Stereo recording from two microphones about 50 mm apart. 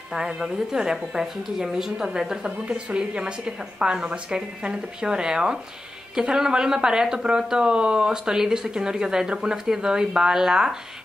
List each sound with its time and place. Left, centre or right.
0.1 s speech: centre